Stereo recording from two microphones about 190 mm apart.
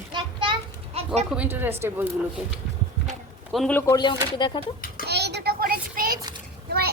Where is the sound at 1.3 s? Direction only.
10° right (ahead or behind).